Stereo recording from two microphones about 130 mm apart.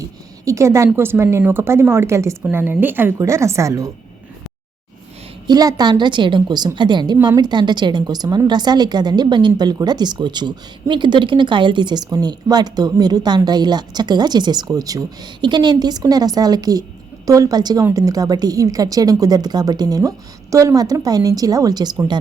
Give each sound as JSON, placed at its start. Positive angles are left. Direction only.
{"t": 0.0, "sound": "a woman's voice", "side_deg": -25}
{"t": 5.5, "sound": "a woman's voice", "side_deg": -30}